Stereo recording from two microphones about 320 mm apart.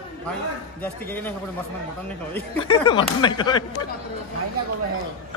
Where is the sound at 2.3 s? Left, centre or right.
Centre.